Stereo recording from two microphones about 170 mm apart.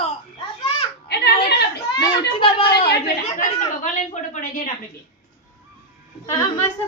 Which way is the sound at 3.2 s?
45° left (ahead or behind).